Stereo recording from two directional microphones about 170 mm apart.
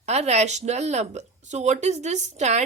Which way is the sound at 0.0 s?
40° right (ahead or behind).